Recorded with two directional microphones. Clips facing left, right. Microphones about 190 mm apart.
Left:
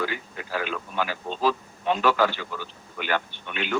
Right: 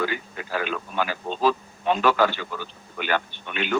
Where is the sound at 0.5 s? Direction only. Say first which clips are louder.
Right 2 dB; 55° right (ahead or behind).